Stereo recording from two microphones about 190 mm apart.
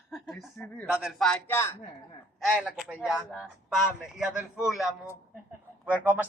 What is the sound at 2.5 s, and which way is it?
A man's voice, 5° right (ahead or behind).